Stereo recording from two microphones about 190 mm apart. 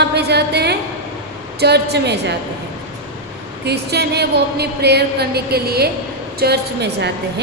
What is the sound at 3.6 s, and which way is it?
A woman's voice, 60° right (ahead or behind).